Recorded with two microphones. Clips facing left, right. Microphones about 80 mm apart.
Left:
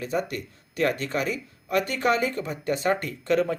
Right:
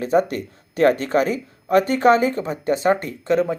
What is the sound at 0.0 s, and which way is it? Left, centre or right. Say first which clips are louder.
Speech: right 9 dB; right.